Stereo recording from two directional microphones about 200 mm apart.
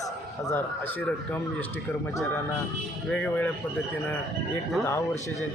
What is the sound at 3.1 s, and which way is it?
Speech, 5° left (ahead or behind).